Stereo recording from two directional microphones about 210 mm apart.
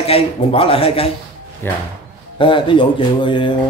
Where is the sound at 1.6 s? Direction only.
10° left (ahead or behind).